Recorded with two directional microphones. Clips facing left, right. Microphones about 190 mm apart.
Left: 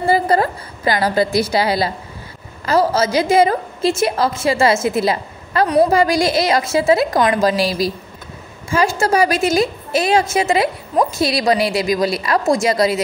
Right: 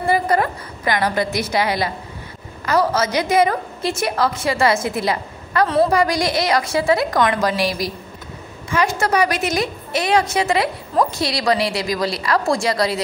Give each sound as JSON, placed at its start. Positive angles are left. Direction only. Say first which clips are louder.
{"t": 0.0, "sound": "a woman's voice", "louder": "left 3 dB", "side_deg": 30}